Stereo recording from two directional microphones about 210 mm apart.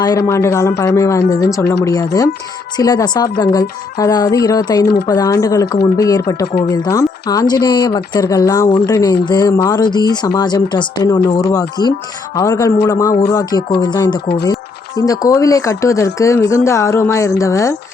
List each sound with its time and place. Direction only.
0.0 s speech: 15° left (ahead or behind)